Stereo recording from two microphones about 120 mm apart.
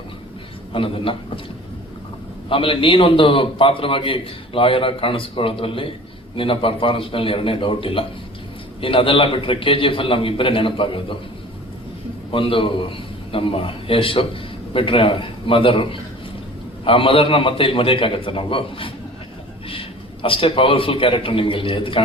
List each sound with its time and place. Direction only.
0.7 s a man's voice: 45° left (ahead or behind)
2.5 s a man's voice: 45° left (ahead or behind)
12.3 s a man's voice: 45° left (ahead or behind)
20.2 s a man's voice: 45° left (ahead or behind)